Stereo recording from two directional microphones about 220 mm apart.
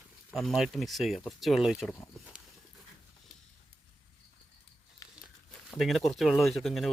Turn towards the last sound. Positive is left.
turn(degrees=0)  # may be behind; listen again after turning